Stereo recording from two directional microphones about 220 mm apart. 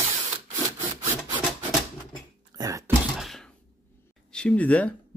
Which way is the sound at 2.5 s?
15° right (ahead or behind).